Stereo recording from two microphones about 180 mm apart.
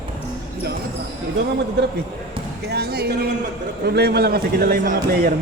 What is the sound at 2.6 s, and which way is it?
A man's voice, 65° right (ahead or behind).